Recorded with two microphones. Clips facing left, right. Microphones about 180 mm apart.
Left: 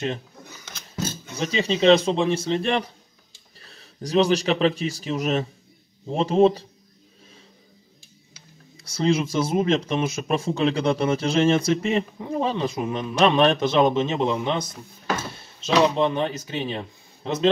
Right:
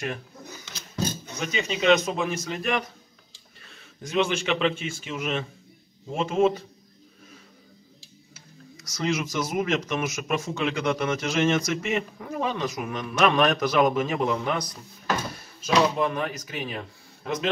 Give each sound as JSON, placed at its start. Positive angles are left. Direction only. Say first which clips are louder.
{"t": 1.3, "sound": "speech", "louder": "left 5 dB", "side_deg": 30}
{"t": 8.7, "sound": "speech", "louder": "left 5 dB", "side_deg": 30}